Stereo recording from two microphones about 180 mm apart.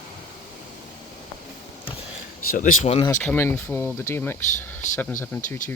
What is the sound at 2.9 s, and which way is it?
Speech, 25° left (ahead or behind).